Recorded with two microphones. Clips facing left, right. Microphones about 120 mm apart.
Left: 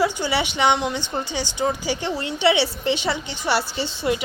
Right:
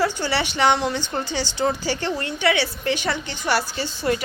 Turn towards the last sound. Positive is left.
turn(degrees=25)  # may be behind; listen again after turning